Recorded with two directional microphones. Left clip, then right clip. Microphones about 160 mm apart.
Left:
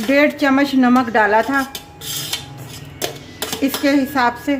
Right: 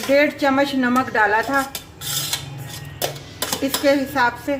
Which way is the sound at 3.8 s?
55° left (ahead or behind).